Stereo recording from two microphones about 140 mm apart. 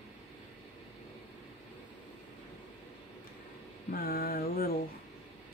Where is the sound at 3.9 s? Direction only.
90° left.